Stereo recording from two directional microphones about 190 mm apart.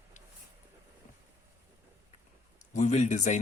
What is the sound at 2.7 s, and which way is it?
Speech, 40° left (ahead or behind).